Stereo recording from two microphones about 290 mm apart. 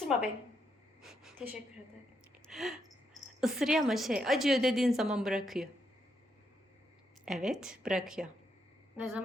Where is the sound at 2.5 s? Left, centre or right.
Centre.